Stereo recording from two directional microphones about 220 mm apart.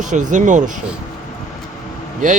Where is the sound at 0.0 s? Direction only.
35° right (ahead or behind).